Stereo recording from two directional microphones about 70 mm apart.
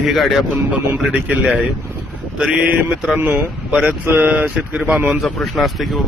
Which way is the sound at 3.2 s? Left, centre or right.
Right.